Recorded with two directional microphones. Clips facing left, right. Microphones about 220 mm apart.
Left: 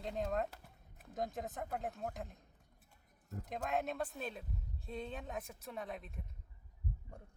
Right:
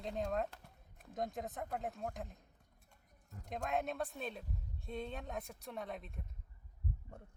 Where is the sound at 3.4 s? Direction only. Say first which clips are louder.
Even; centre (ahead or behind).